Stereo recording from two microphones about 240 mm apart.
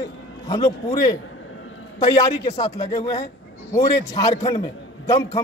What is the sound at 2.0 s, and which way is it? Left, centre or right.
A man's voice, centre.